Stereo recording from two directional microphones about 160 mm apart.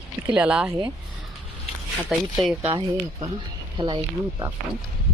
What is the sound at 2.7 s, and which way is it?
Speech, 30° right (ahead or behind).